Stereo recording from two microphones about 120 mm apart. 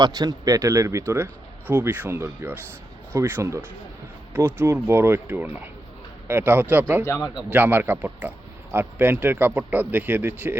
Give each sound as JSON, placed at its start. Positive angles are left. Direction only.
{"t": 0.0, "sound": "a man's voice", "side_deg": -35}
{"t": 7.0, "sound": "a man's voice", "side_deg": 25}
{"t": 7.5, "sound": "speech", "side_deg": -15}